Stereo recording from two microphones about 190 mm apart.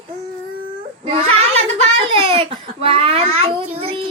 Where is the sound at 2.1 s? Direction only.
30° right (ahead or behind).